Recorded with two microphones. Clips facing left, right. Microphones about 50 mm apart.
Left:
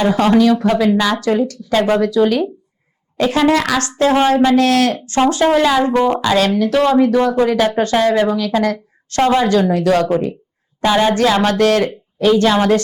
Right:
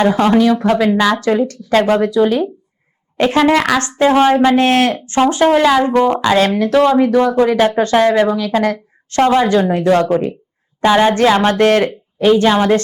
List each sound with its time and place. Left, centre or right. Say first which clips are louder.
0.2 s a woman's voice: even; centre
0.6 s a woman's voice: right 1 dB; right
1.1 s speech: right 1 dB; right
1.9 s a woman's voice: left 2 dB; right
3.2 s a woman's voice: right 2 dB; right; by 6.3 s centre
6.3 s speech: right 2 dB; right
6.8 s a woman's voice: left 1 dB; right
7.8 s a woman's voice: right 2 dB; right
11.9 s speech: right 2 dB; centre